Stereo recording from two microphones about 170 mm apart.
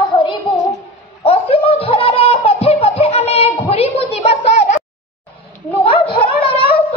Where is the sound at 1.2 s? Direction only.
35° left (ahead or behind).